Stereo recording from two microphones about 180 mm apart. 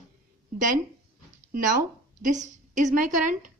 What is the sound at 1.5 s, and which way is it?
Speech, 45° right (ahead or behind).